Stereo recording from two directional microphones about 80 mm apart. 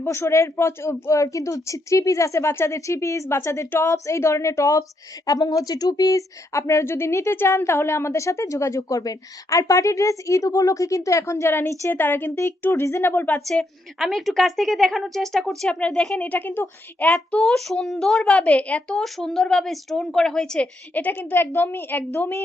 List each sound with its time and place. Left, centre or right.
0.0 s a woman's voice: left
14.0 s speech: centre; by 17.1 s left
17.4 s a woman's voice: centre
18.9 s speech: centre
20.9 s a woman's voice: left